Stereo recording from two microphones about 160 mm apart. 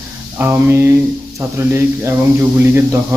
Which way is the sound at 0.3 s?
10° right (ahead or behind).